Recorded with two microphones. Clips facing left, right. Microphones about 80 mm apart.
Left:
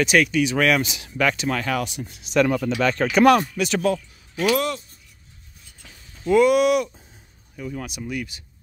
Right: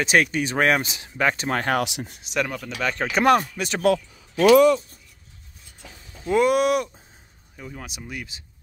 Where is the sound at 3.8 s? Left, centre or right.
Right.